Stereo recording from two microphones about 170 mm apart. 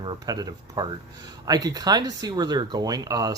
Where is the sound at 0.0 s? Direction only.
25° right (ahead or behind).